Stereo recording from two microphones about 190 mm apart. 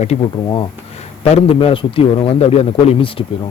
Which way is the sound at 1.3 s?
30° left (ahead or behind).